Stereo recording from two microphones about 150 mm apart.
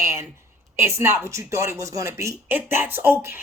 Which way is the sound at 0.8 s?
20° right (ahead or behind).